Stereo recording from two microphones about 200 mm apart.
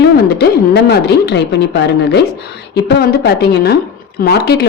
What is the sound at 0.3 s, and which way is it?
Speech, 55° left (ahead or behind).